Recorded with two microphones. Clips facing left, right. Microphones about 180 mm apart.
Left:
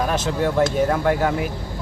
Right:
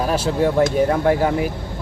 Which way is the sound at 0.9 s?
25° right (ahead or behind).